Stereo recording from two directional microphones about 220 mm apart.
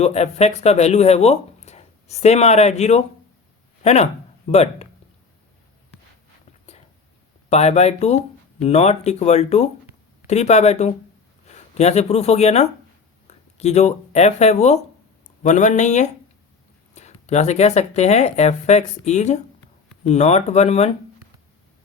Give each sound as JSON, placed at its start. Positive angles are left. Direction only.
{"t": 0.0, "sound": "speech", "side_deg": 30}
{"t": 7.5, "sound": "speech", "side_deg": 30}